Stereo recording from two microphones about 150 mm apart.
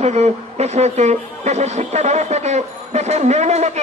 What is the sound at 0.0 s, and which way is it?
Speech, 45° right (ahead or behind).